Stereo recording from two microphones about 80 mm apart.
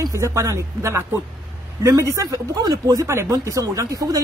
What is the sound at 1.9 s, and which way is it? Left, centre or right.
Speech, right.